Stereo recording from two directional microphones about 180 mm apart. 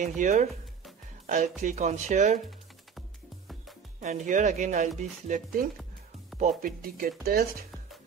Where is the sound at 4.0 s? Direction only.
45° right (ahead or behind).